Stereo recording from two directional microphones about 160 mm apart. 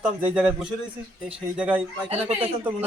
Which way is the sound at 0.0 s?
10° right (ahead or behind).